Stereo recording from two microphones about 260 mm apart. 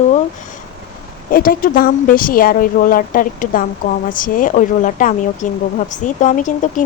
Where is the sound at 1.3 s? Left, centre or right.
Left.